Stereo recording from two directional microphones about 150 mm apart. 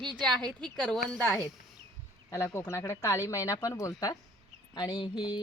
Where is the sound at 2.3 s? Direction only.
20° left (ahead or behind).